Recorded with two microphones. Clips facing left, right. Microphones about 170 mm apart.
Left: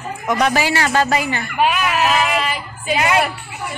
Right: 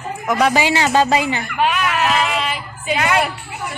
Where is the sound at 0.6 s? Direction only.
20° right (ahead or behind).